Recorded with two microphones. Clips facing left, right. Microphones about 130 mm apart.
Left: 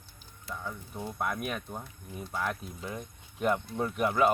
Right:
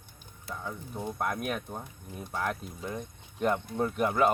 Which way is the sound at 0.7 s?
15° right (ahead or behind).